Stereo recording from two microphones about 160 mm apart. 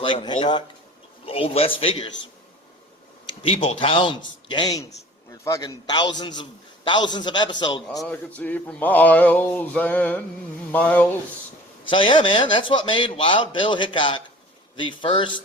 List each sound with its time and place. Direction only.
0.0 s a man's voice: 30° left (ahead or behind)
3.4 s a man's voice: 40° left (ahead or behind)
7.9 s speech: 10° left (ahead or behind)
11.9 s a man's voice: 30° left (ahead or behind)